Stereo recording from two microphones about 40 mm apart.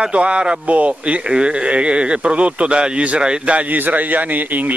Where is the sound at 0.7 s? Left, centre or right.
Right.